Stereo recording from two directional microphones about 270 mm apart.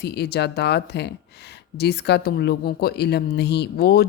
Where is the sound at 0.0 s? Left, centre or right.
Left.